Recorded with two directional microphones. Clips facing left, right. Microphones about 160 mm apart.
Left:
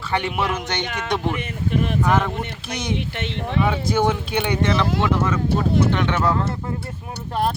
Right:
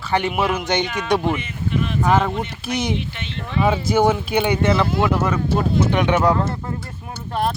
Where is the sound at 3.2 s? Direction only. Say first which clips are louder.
Left 3 dB; 70° left (ahead or behind).